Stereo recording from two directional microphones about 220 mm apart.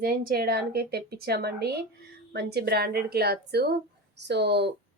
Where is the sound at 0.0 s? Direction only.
45° right (ahead or behind).